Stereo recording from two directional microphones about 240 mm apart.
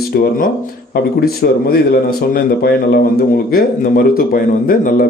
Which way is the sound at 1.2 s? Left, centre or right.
Left.